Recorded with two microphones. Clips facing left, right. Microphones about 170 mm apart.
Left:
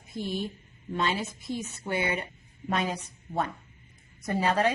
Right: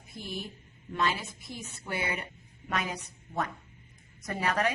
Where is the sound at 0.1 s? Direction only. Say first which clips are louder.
Left 7 dB; 25° left (ahead or behind).